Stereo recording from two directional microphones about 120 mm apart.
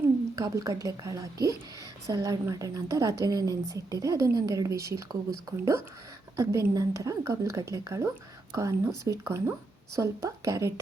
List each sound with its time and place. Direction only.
0.3 s a woman's voice: 30° right (ahead or behind)